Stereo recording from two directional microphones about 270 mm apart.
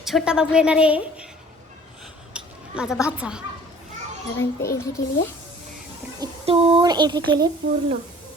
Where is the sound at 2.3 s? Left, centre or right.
Centre.